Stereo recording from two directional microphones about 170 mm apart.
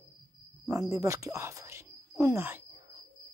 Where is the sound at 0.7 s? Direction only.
20° right (ahead or behind).